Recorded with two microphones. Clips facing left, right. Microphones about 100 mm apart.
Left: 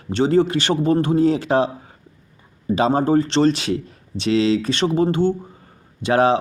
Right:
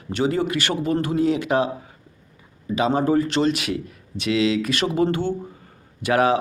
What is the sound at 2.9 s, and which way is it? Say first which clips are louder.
Speech: left 1 dB; 35° left (ahead or behind).